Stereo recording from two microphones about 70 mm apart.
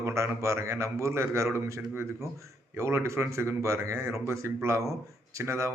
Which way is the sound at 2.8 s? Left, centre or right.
Right.